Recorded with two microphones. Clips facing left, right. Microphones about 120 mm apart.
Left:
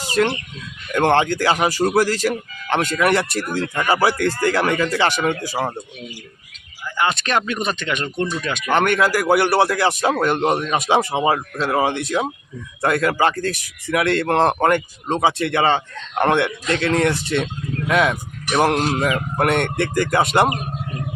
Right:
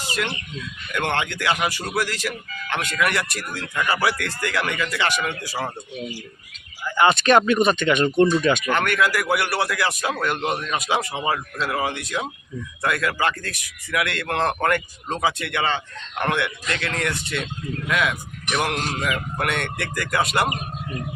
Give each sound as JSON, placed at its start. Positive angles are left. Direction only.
{"t": 0.1, "sound": "speech", "side_deg": 40}
{"t": 6.9, "sound": "speech", "side_deg": 0}
{"t": 8.7, "sound": "speech", "side_deg": 30}